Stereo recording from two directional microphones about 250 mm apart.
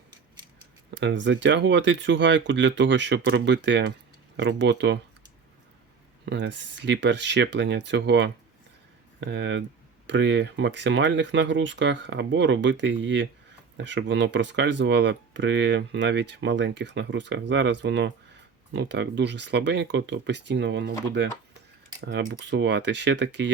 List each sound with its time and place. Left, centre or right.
0.9 s speech: right
6.2 s speech: right